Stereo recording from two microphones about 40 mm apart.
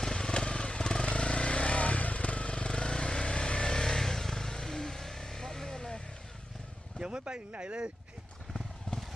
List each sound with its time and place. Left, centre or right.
0.0 s vehicle: centre
3.8 s vehicle: centre
7.0 s speech: right